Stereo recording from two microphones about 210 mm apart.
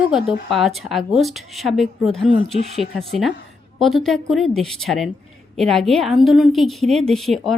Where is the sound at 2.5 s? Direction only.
30° right (ahead or behind).